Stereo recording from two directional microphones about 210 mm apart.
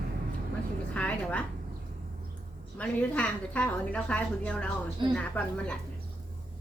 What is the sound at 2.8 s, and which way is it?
A woman's voice, 5° left (ahead or behind).